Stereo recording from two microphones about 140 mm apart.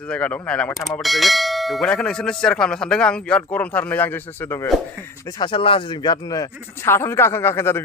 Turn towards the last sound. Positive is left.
turn(degrees=15)  # may be behind; listen again after turning